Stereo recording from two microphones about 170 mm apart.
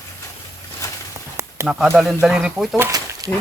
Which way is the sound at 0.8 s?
20° left (ahead or behind).